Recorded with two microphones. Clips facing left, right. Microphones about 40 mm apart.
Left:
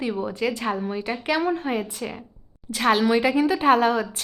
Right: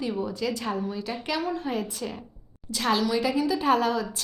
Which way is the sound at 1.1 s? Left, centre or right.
Left.